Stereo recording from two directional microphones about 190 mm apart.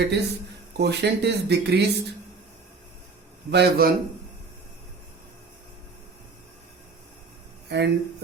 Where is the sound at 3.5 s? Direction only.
55° right (ahead or behind).